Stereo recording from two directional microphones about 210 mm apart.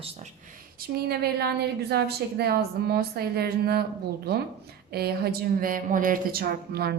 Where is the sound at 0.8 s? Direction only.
50° right (ahead or behind).